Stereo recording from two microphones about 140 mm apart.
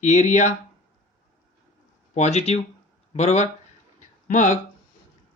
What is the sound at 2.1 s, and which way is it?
Speech, 55° left (ahead or behind).